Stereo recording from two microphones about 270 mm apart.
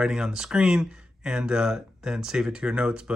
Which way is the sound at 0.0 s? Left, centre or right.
Centre.